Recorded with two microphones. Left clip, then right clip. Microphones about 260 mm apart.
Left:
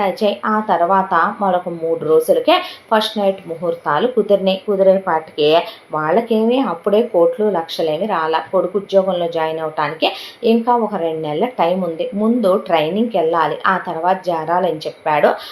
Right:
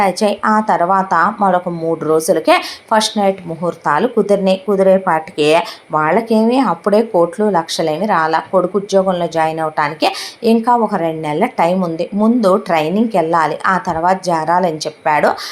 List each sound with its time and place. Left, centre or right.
0.0 s speech: right